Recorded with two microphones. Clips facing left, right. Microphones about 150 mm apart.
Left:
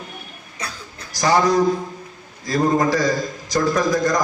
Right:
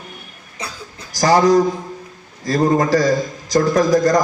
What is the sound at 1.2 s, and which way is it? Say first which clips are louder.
A man's voice: right 4 dB; 35° right (ahead or behind).